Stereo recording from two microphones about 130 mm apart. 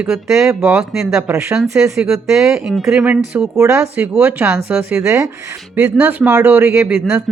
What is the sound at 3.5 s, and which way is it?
Speech, 20° right (ahead or behind).